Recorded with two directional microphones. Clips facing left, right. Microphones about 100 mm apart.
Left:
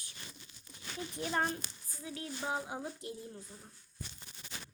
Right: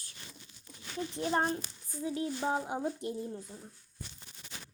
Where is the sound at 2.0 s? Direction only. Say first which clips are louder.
Right 8 dB; 25° right (ahead or behind).